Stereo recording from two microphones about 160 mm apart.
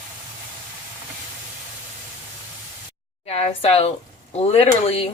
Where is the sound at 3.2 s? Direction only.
35° left (ahead or behind).